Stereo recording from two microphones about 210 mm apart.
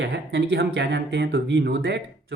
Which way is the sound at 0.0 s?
55° right (ahead or behind).